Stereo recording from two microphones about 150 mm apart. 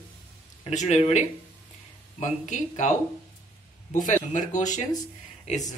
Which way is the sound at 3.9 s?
60° left (ahead or behind).